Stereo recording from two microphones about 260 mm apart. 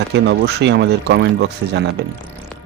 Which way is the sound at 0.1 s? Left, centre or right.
Right.